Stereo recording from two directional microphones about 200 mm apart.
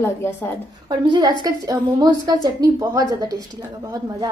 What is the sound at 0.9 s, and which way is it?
A woman's voice, 20° right (ahead or behind).